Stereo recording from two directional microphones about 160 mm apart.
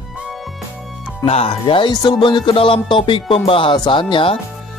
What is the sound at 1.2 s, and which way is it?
Music, 40° left (ahead or behind).